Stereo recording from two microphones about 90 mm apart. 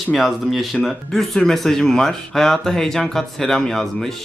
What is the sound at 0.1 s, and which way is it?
Speech, centre (ahead or behind).